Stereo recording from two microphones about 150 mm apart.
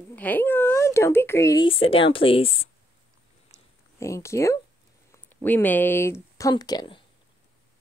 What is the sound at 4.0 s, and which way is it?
Speech, 20° left (ahead or behind).